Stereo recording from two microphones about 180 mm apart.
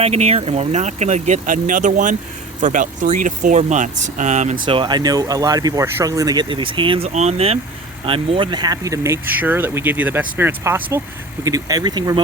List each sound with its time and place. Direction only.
0.0 s speech: 35° right (ahead or behind)
4.6 s speech: 25° right (ahead or behind)